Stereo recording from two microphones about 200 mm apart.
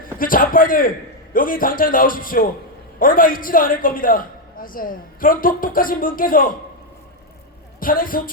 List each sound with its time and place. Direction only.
0.0 s a man's voice: 45° left (ahead or behind)
7.8 s a man's voice: 45° left (ahead or behind)